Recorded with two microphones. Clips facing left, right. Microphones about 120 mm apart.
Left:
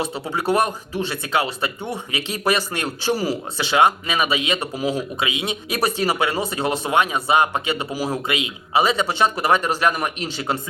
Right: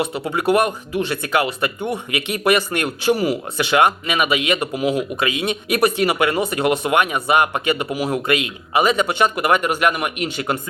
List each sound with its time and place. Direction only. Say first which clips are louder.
0.1 s speech: right 3 dB; 30° left (ahead or behind)